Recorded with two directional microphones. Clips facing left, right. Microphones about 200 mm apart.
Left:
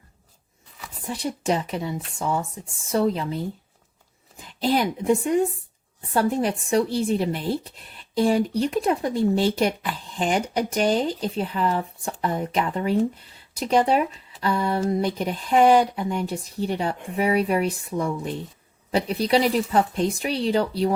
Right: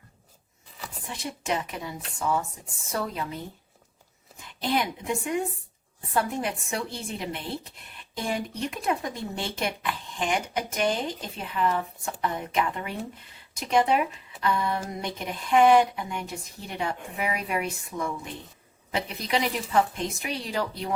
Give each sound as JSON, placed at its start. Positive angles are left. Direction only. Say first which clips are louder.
{"t": 1.0, "sound": "speech", "louder": "left 7 dB", "side_deg": 35}
{"t": 4.4, "sound": "speech", "louder": "left 5 dB", "side_deg": 35}